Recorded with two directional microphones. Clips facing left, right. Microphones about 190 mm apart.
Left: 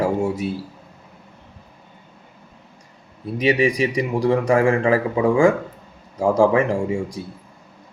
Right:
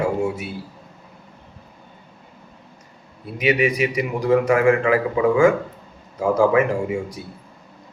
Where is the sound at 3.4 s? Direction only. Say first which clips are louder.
Left 1 dB; 30° left (ahead or behind).